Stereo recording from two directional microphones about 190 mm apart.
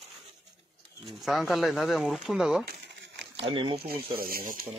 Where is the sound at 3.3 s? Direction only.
25° right (ahead or behind).